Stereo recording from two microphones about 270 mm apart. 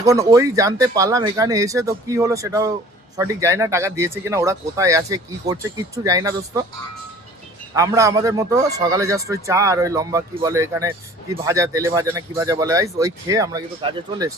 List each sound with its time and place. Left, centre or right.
0.0 s speech: centre
7.8 s speech: centre